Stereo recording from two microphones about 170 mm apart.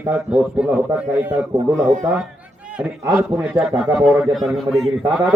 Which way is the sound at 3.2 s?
15° right (ahead or behind).